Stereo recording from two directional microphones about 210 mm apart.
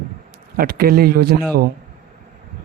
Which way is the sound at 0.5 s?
45° right (ahead or behind).